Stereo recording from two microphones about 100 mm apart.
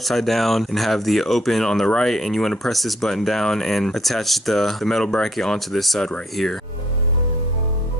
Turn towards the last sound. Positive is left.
turn(degrees=5)  # may be behind; listen again after turning